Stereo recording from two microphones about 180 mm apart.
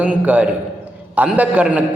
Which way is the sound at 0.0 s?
10° right (ahead or behind).